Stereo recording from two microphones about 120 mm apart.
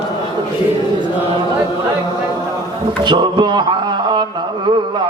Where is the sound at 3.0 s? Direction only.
40° right (ahead or behind).